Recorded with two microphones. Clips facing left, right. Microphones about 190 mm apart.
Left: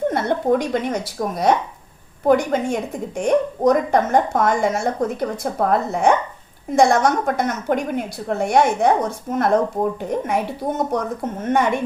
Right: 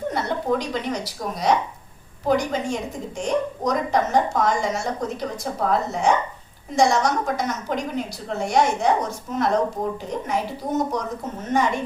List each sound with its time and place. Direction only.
0.1 s a woman's voice: 55° left (ahead or behind)